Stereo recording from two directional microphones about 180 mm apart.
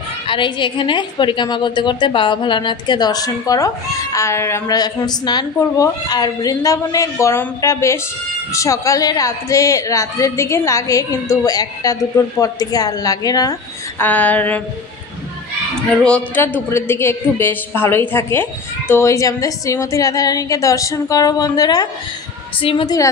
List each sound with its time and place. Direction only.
0.3 s a woman's voice: 25° left (ahead or behind)
14.0 s a woman's voice: 10° left (ahead or behind)
15.9 s a woman's voice: 5° left (ahead or behind); by 22.9 s 30° left (ahead or behind)